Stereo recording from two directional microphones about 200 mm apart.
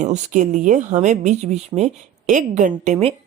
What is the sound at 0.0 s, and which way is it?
Speech, 40° right (ahead or behind).